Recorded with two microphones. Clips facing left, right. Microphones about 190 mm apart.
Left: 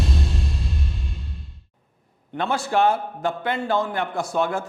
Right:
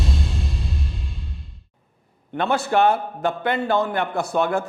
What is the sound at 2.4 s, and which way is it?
A man's voice, 60° right (ahead or behind).